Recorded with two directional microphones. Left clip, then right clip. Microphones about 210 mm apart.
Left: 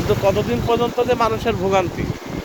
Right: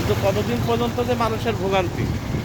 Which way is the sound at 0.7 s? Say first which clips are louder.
Left 5 dB; 35° left (ahead or behind).